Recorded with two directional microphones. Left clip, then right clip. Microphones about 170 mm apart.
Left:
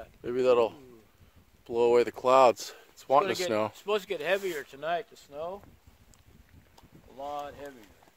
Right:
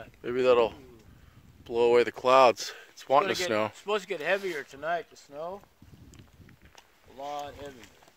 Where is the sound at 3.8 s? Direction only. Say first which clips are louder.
Even; 65° left (ahead or behind).